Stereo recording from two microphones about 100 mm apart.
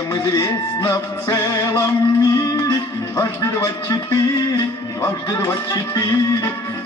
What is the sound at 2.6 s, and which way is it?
Music, 30° left (ahead or behind).